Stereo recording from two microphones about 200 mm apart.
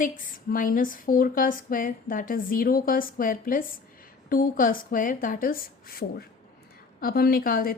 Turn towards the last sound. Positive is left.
turn(degrees=45)  # may be behind; listen again after turning